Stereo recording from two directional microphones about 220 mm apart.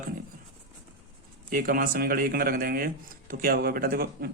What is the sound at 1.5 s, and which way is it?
Speech, 40° right (ahead or behind).